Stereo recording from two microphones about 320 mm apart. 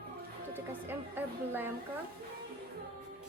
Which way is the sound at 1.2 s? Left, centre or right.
Centre.